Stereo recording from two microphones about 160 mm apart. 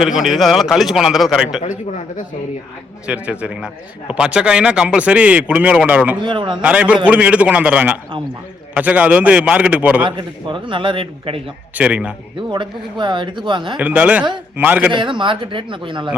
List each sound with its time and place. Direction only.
0.0 s a man's voice: centre (ahead or behind)
1.6 s a man's voice: 50° left (ahead or behind)
3.1 s speech: 5° right (ahead or behind)
6.2 s speech: 30° right (ahead or behind)
6.6 s speech: 10° right (ahead or behind)
10.1 s speech: 30° right (ahead or behind)
11.7 s speech: 5° right (ahead or behind)
12.4 s speech: 30° right (ahead or behind)
13.7 s speech: 10° right (ahead or behind)
14.9 s speech: 30° right (ahead or behind)